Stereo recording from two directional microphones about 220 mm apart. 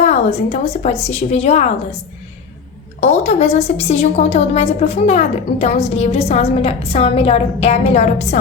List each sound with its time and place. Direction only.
0.0 s a woman's voice: 30° left (ahead or behind)
3.0 s a woman's voice: 30° left (ahead or behind)